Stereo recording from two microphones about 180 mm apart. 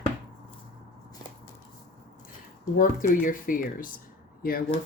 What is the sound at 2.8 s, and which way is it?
Speech, 50° left (ahead or behind).